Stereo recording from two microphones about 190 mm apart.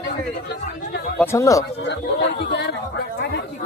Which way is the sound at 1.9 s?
65° left (ahead or behind).